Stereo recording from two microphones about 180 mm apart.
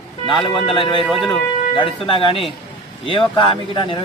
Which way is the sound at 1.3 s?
25° left (ahead or behind).